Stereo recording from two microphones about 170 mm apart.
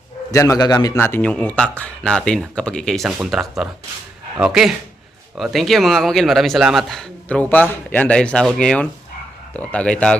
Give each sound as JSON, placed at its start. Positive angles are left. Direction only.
{"t": 0.3, "sound": "a man's voice", "side_deg": 20}